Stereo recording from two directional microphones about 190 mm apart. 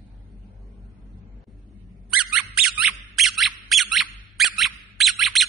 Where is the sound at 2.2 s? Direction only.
5° right (ahead or behind).